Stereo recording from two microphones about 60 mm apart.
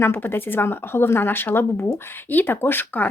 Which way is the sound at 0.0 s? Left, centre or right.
Left.